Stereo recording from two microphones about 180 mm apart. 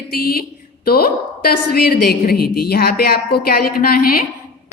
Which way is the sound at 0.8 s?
55° left (ahead or behind).